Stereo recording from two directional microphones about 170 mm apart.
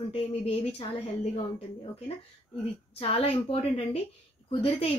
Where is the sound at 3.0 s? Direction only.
35° left (ahead or behind).